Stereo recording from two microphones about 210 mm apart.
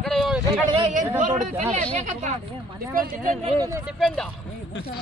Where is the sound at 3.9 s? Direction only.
Centre (ahead or behind).